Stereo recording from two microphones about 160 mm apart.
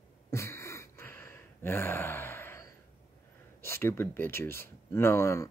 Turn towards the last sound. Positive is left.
turn(degrees=20)  # may be behind; listen again after turning